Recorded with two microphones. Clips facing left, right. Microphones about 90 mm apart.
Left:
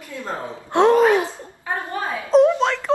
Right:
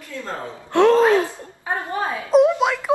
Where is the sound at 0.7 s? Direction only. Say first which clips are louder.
Even; 20° left (ahead or behind).